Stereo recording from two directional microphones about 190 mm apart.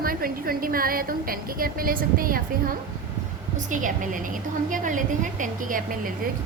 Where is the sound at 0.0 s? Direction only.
50° right (ahead or behind).